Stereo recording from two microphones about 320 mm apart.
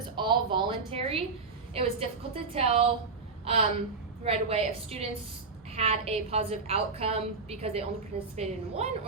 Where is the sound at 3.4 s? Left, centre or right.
Centre.